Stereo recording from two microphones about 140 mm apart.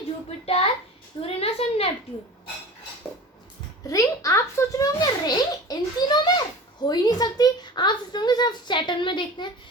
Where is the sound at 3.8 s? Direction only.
25° left (ahead or behind).